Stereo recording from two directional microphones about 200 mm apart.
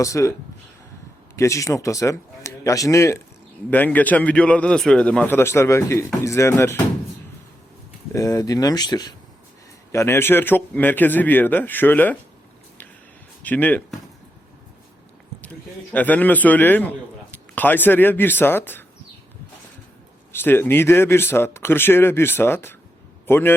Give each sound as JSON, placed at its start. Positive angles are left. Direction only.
{"t": 0.0, "sound": "speech", "side_deg": 15}
{"t": 1.4, "sound": "speech", "side_deg": 15}
{"t": 8.1, "sound": "speech", "side_deg": 15}
{"t": 13.4, "sound": "speech", "side_deg": 10}
{"t": 15.9, "sound": "speech", "side_deg": 10}
{"t": 20.3, "sound": "a man's voice", "side_deg": 10}